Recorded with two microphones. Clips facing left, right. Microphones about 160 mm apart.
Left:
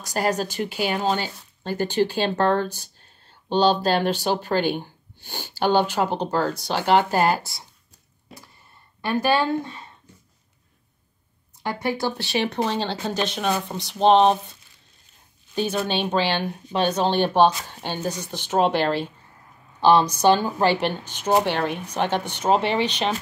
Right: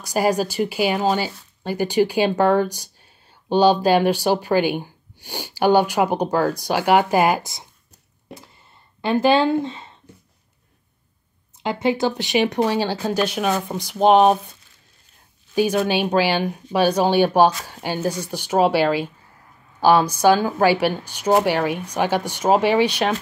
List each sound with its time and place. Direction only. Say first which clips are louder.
0.0 s speech: right 4 dB; 10° right (ahead or behind)
9.0 s speech: right 5 dB; 25° right (ahead or behind)
11.5 s speech: right 5 dB; 20° right (ahead or behind)